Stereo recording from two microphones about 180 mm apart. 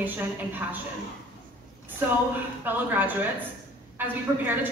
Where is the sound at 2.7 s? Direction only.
10° right (ahead or behind).